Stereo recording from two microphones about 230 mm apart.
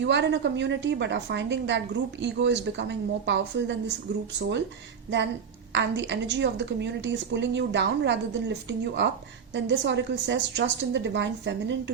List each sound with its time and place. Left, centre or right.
0.0 s a woman's voice: right
5.7 s a woman's voice: right
9.6 s a woman's voice: right